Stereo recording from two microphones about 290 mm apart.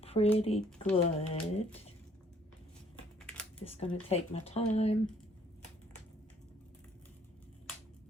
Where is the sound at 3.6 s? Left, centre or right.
Centre.